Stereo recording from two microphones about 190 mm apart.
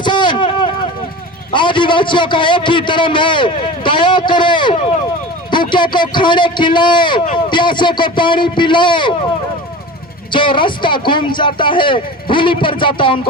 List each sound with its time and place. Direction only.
0.0 s a sound: 25° left (ahead or behind)
1.5 s a man's voice: 25° left (ahead or behind)
10.3 s a man's voice: 25° left (ahead or behind)